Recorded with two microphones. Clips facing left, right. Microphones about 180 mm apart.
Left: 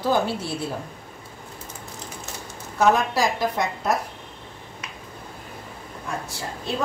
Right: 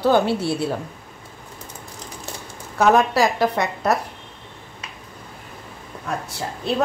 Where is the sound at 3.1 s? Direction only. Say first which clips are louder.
Right 4 dB; 65° right (ahead or behind).